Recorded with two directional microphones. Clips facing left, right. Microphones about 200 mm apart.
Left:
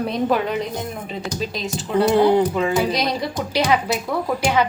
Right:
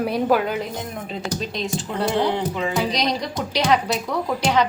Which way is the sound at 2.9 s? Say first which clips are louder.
Left 1 dB; 5° left (ahead or behind).